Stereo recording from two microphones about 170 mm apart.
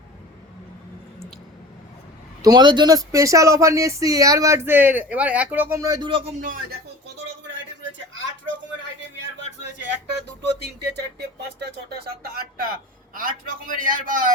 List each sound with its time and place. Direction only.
2.4 s speech: 25° right (ahead or behind)
6.4 s a man's voice: 55° right (ahead or behind)
7.4 s a sound: 90° right
10.1 s a man's voice: 85° right; by 14.3 s 50° right (ahead or behind)